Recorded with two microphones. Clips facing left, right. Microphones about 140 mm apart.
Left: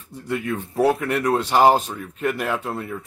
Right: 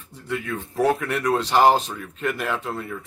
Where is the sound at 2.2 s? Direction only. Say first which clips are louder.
Left 2 dB; 10° left (ahead or behind).